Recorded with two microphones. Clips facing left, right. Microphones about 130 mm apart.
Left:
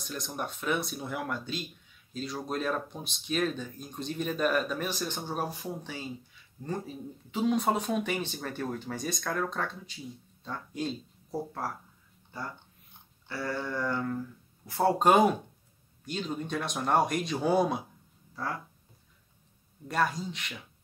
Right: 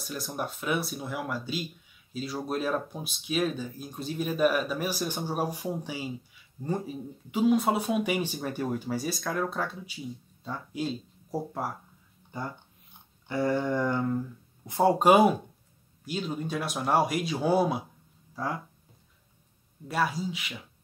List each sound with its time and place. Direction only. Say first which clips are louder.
0.0 s speech: right 2 dB; 5° right (ahead or behind)
7.2 s speech: right 3 dB; 10° right (ahead or behind)
13.3 s a sound: right 7 dB; 20° right (ahead or behind)
14.7 s speech: right 3 dB; 15° right (ahead or behind)
18.3 s speech: right 3 dB; 15° right (ahead or behind)
19.9 s speech: right 1 dB; 5° right (ahead or behind)